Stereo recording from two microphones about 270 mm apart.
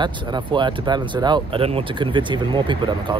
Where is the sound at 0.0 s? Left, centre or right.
Centre.